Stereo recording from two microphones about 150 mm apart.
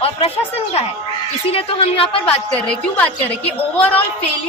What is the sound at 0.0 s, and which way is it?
A woman's voice, 40° left (ahead or behind).